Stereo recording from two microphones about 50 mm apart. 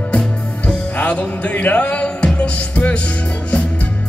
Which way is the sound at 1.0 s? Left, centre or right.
Left.